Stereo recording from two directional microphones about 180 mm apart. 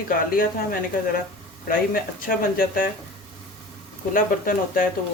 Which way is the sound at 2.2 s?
50° left (ahead or behind).